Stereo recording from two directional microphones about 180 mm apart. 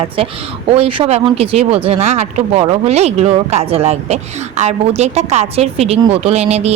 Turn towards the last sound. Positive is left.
turn(degrees=-35)  # may be behind; listen again after turning